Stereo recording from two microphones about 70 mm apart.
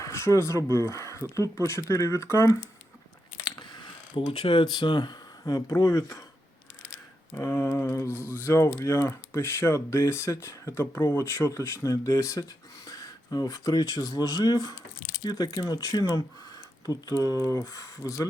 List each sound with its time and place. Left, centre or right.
0.0 s speech: left
3.4 s biting: left
4.6 s speech: left
5.7 s speech: left
7.3 s speech: left
11.9 s speech: left